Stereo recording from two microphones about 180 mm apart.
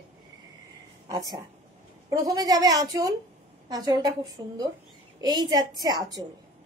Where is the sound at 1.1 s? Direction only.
20° right (ahead or behind).